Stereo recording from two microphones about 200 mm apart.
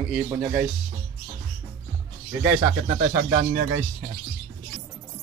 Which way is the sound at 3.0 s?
40° right (ahead or behind).